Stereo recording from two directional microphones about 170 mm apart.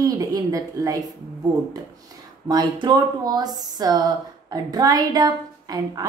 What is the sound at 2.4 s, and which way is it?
Speech, 25° right (ahead or behind).